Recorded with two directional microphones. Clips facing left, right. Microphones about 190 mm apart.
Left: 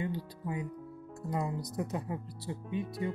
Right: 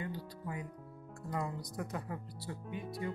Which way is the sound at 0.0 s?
25° left (ahead or behind).